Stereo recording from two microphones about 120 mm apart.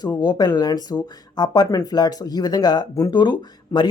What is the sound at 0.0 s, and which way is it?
Speech, 35° left (ahead or behind).